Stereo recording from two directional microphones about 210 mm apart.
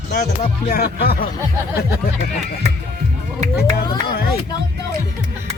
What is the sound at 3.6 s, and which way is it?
Speech, 50° left (ahead or behind).